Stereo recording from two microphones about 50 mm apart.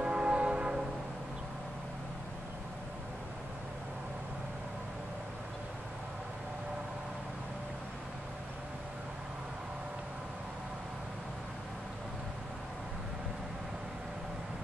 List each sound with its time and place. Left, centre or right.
0.0 s church bell: centre